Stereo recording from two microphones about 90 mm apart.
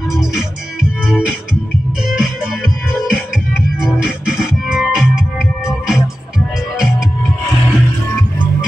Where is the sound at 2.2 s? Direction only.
5° right (ahead or behind).